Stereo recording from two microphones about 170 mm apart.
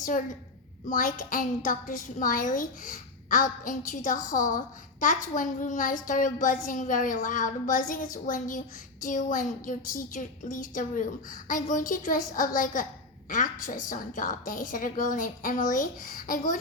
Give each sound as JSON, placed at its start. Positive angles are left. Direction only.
{"t": 0.9, "sound": "a woman's voice", "side_deg": 55}